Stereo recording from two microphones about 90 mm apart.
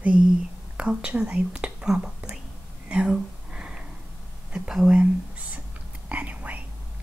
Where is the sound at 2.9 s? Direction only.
10° right (ahead or behind).